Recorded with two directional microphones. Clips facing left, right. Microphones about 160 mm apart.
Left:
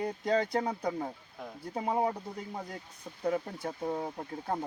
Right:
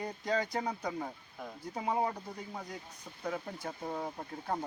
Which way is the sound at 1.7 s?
30° left (ahead or behind).